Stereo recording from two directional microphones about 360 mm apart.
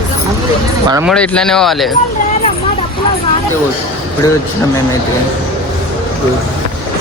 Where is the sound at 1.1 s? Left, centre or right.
Centre.